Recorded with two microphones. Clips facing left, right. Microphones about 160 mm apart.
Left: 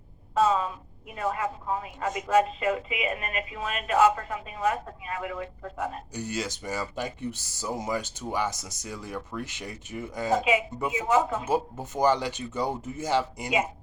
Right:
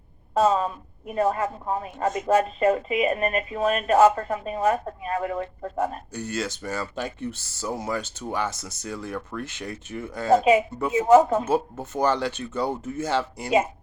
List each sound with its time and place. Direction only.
0.3 s speech: 40° right (ahead or behind)
6.1 s speech: 15° left (ahead or behind)
10.9 s speech: 40° right (ahead or behind)
11.4 s speech: 15° left (ahead or behind)